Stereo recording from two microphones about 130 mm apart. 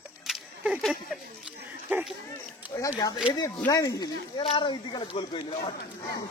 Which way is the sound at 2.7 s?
25° left (ahead or behind).